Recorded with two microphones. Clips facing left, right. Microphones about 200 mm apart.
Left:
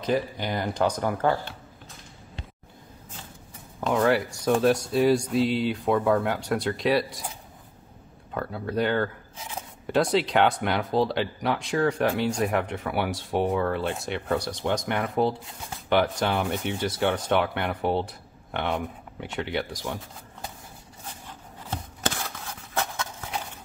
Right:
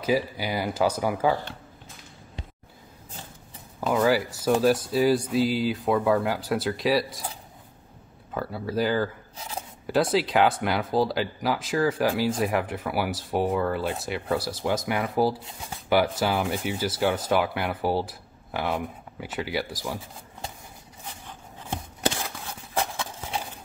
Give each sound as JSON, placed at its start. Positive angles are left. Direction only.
{"t": 0.0, "sound": "speech", "side_deg": -5}
{"t": 3.8, "sound": "speech", "side_deg": 0}
{"t": 8.3, "sound": "speech", "side_deg": -5}
{"t": 9.4, "sound": "speech", "side_deg": -35}
{"t": 9.8, "sound": "speech", "side_deg": 0}
{"t": 22.8, "sound": "horse", "side_deg": -30}